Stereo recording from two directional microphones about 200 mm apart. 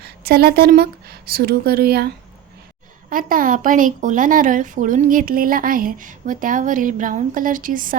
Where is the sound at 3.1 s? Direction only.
45° right (ahead or behind).